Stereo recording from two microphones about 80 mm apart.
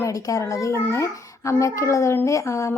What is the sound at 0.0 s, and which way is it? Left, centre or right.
A woman's voice, left.